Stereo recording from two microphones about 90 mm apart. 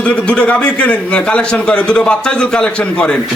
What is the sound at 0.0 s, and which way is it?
A man's voice, 15° left (ahead or behind).